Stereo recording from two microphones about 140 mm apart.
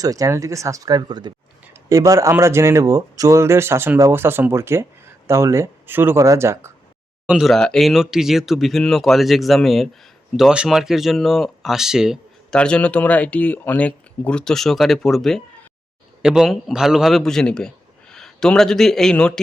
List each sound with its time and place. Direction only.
0.0 s speech: 25° right (ahead or behind)
7.3 s speech: centre (ahead or behind)
12.5 s speech: 10° left (ahead or behind)